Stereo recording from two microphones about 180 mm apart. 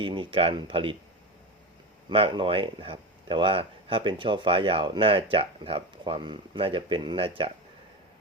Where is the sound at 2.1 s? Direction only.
30° right (ahead or behind).